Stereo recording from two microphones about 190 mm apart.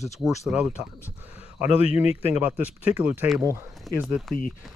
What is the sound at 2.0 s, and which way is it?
Speech, 10° right (ahead or behind).